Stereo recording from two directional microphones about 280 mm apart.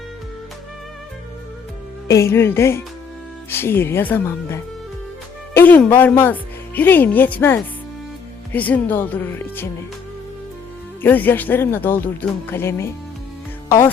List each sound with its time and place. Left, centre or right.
2.0 s a woman's voice: centre
11.0 s a woman's voice: centre
13.7 s music: centre